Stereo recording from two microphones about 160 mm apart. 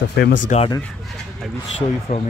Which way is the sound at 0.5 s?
45° left (ahead or behind).